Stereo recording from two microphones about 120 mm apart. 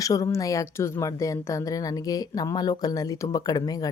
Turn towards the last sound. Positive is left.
turn(degrees=30)  # may be behind; listen again after turning